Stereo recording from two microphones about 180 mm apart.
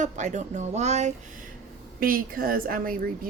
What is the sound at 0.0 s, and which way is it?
Speech, 40° right (ahead or behind).